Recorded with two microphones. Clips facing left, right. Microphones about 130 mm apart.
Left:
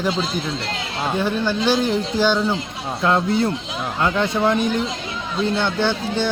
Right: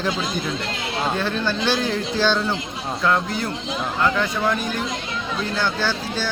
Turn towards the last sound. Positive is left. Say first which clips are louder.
# left 4 dB
turn(degrees=20)  # may be behind; listen again after turning